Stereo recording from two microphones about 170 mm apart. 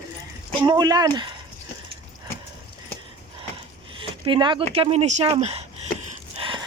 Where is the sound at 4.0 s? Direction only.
30° right (ahead or behind).